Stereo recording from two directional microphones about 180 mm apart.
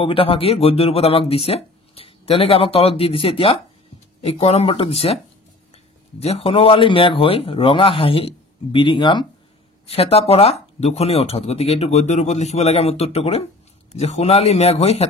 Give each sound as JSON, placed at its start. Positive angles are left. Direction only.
{"t": 0.0, "sound": "a man's voice", "side_deg": 30}